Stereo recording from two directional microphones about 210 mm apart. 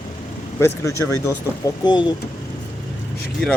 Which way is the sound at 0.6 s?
15° left (ahead or behind).